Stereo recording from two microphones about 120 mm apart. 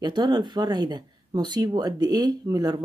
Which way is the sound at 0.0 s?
40° right (ahead or behind).